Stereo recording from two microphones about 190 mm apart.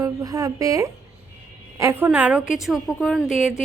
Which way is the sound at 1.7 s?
15° right (ahead or behind).